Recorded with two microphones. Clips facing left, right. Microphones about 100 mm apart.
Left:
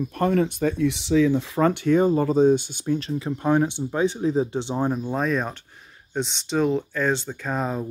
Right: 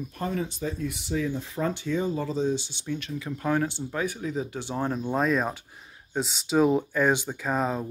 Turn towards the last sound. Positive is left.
turn(degrees=0)  # may be behind; listen again after turning